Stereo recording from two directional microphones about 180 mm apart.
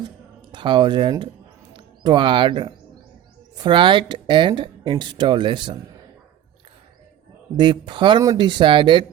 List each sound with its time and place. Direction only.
0.5 s speech: 25° right (ahead or behind)
7.5 s speech: 25° right (ahead or behind)